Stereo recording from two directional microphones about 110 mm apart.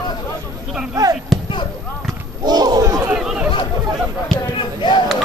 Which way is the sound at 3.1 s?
5° right (ahead or behind).